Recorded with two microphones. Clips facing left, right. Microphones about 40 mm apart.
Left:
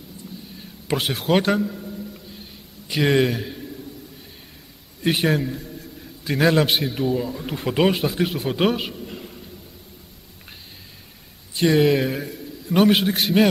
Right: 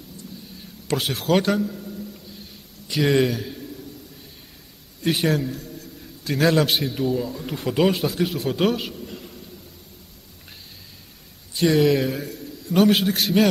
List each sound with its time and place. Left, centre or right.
0.8 s a man's voice: centre
3.0 s a man's voice: centre
3.3 s a man's voice: centre
5.0 s a man's voice: centre
11.5 s a man's voice: centre